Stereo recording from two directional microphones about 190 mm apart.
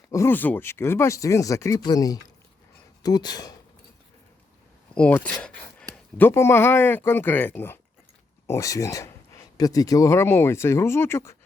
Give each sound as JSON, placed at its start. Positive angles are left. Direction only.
{"t": 0.1, "sound": "speech", "side_deg": 15}
{"t": 4.9, "sound": "speech", "side_deg": 5}